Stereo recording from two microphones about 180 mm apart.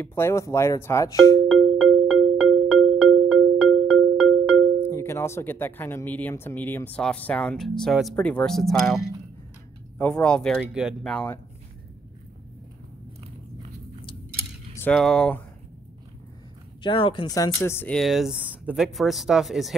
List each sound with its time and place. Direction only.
0.0 s speech: 15° left (ahead or behind)
1.5 s music: 5° right (ahead or behind)
4.7 s speech: 15° left (ahead or behind)
14.8 s speech: 5° left (ahead or behind)
16.8 s speech: 25° left (ahead or behind); by 19.7 s centre (ahead or behind)